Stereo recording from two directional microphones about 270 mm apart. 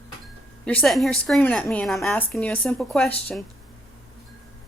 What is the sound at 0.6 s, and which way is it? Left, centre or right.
A woman's voice, centre.